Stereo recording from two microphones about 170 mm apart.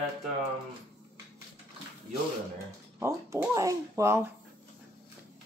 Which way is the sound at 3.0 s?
10° right (ahead or behind).